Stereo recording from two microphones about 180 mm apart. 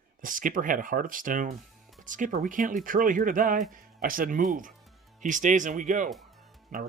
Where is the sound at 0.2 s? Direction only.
50° right (ahead or behind).